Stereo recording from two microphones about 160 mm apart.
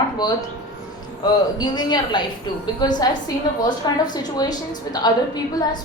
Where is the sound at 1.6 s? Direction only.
25° left (ahead or behind).